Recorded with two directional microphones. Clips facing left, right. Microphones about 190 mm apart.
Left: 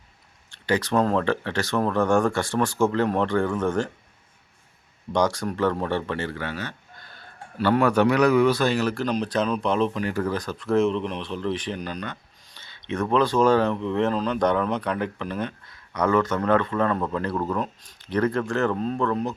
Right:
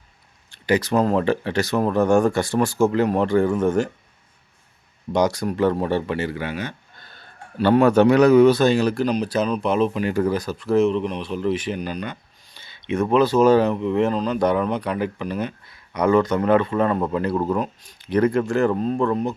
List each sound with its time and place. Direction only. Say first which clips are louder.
0.7 s speech: right 3 dB; 10° right (ahead or behind)
5.1 s a man's voice: right 3 dB; 10° right (ahead or behind)
9.0 s speech: right 3 dB; 5° right (ahead or behind)
17.6 s speech: right 3 dB; 5° right (ahead or behind)